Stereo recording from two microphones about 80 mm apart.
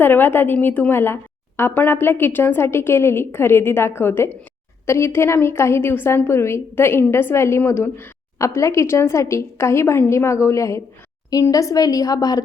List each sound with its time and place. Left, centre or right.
0.0 s a woman's voice: left